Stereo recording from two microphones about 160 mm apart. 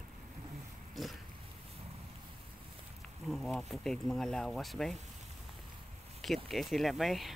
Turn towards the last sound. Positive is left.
turn(degrees=0)  # may be behind; listen again after turning